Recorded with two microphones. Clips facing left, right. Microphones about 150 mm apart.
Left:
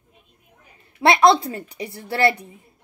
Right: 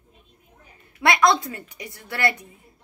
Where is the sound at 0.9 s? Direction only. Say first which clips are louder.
Left 4 dB; 30° left (ahead or behind).